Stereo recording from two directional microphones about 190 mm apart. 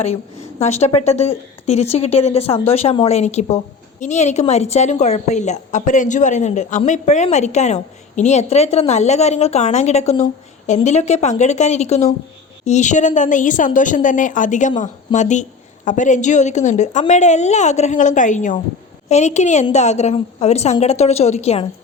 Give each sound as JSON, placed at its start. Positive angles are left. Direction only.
{"t": 0.6, "sound": "a woman's voice", "side_deg": 35}